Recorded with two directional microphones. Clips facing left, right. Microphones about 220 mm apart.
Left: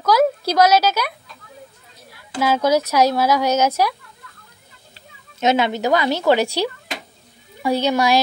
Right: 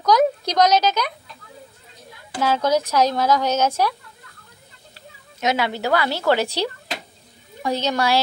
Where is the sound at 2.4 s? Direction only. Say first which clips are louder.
Left 2 dB; 10° left (ahead or behind).